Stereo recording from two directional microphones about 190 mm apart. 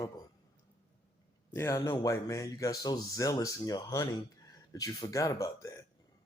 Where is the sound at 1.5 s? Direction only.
15° left (ahead or behind).